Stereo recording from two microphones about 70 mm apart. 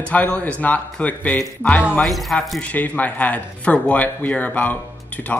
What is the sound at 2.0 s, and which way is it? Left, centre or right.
Speech, centre.